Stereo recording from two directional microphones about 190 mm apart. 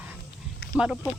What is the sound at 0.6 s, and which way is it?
Snake, 55° left (ahead or behind).